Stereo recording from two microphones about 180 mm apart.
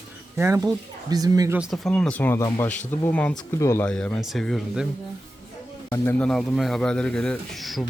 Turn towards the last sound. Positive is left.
turn(degrees=0)  # may be behind; listen again after turning